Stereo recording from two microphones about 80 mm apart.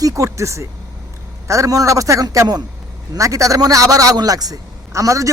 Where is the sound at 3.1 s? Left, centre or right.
Right.